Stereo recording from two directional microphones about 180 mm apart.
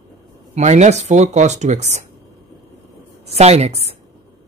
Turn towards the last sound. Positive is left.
turn(degrees=-35)  # may be behind; listen again after turning